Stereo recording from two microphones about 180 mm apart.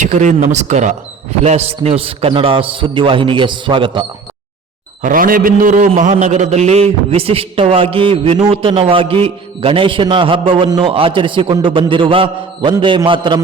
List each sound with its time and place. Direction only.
0.0 s a man's voice: 45° right (ahead or behind); by 4.0 s 25° right (ahead or behind)
5.0 s a man's voice: 50° right (ahead or behind); by 13.4 s 25° right (ahead or behind)